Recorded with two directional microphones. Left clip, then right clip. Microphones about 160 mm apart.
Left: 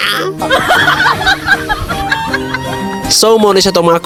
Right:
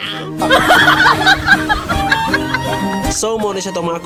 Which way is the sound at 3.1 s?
40° left (ahead or behind).